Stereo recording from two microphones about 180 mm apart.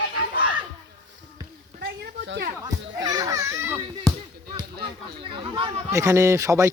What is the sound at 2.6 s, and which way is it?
A child's voice, 20° right (ahead or behind).